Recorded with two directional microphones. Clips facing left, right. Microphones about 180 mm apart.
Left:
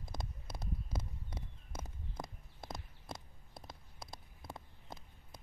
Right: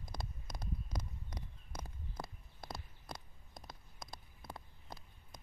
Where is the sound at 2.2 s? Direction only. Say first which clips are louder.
Left 1 dB; 20° left (ahead or behind).